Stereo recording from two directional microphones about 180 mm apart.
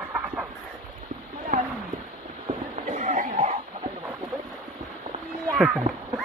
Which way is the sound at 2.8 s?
45° right (ahead or behind).